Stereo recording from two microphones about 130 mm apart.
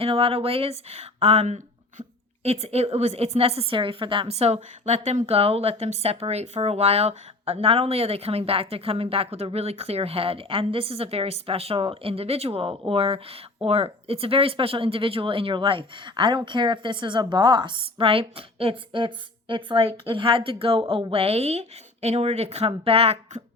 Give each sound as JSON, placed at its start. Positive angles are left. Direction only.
{"t": 0.0, "sound": "speech", "side_deg": -50}